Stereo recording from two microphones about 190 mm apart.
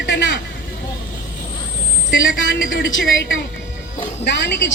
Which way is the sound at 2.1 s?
80° left.